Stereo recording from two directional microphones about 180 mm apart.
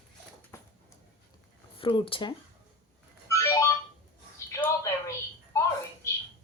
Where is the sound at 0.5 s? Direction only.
15° left (ahead or behind).